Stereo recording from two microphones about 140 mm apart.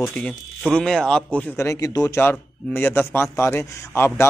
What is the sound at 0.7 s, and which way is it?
Speech, 5° left (ahead or behind).